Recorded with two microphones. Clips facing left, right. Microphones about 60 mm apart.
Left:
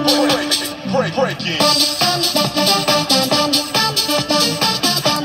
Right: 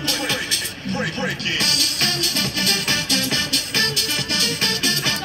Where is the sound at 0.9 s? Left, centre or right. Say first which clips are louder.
Left 8 dB; left.